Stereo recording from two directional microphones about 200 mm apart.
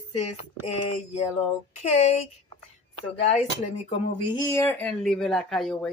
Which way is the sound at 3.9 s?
20° left (ahead or behind).